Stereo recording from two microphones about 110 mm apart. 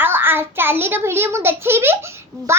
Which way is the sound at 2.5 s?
25° right (ahead or behind).